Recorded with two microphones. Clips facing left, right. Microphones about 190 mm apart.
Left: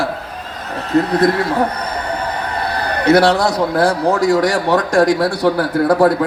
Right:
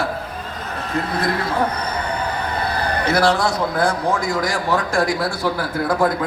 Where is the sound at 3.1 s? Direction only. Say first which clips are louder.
Left 7 dB; 35° left (ahead or behind).